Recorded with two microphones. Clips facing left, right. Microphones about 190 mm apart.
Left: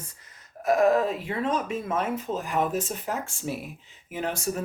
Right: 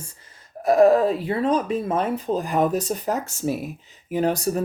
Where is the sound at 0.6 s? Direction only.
35° right (ahead or behind).